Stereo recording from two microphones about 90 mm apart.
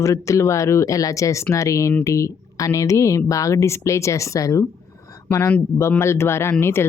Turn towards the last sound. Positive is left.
turn(degrees=25)  # may be behind; listen again after turning